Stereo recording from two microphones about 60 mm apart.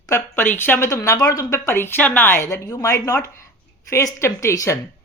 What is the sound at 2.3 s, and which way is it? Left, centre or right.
Speech, left.